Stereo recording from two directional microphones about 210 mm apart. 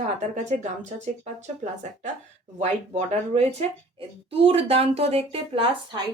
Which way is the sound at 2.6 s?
30° right (ahead or behind).